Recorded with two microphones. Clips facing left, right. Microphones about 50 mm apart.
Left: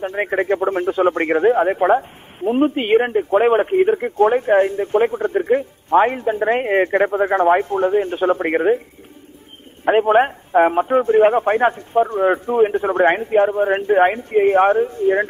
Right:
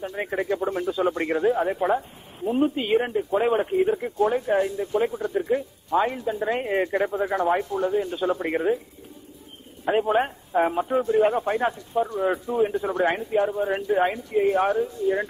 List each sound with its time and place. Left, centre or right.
0.0 s speech: left
9.8 s speech: left